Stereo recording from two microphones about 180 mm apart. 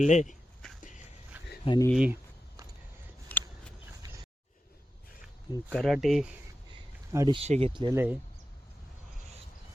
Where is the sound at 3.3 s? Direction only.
10° left (ahead or behind).